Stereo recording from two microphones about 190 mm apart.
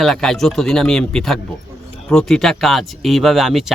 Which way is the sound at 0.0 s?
Centre (ahead or behind).